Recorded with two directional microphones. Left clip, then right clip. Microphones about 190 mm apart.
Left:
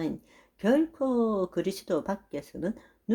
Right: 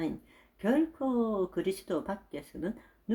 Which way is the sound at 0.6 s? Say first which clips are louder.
Left 4 dB; 35° left (ahead or behind).